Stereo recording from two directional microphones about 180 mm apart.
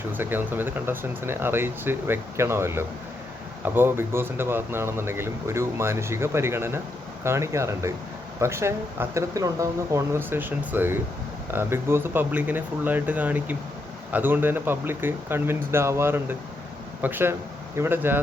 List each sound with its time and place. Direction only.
0.1 s speech: 10° right (ahead or behind)